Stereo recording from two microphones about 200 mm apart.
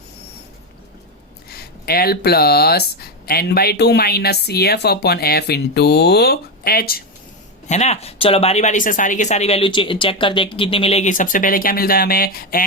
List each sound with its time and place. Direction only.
1.5 s speech: 50° left (ahead or behind)
7.7 s speech: 35° left (ahead or behind)